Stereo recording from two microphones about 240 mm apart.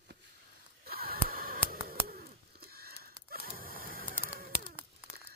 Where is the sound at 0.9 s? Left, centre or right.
Right.